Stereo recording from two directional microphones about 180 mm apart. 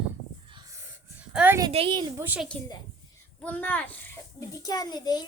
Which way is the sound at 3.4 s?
10° left (ahead or behind).